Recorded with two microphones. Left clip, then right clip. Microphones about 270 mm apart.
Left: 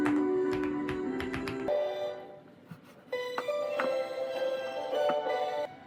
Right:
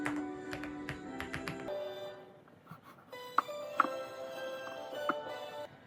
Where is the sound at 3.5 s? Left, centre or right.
Centre.